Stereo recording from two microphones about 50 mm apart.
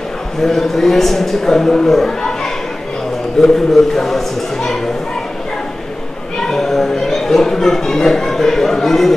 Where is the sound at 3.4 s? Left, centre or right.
Centre.